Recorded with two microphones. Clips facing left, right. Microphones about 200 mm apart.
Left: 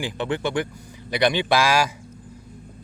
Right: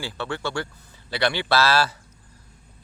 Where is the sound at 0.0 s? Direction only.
20° left (ahead or behind).